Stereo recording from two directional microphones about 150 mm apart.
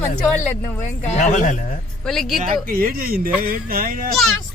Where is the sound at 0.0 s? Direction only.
10° left (ahead or behind).